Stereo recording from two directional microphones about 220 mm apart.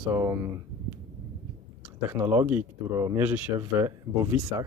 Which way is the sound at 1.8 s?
10° right (ahead or behind).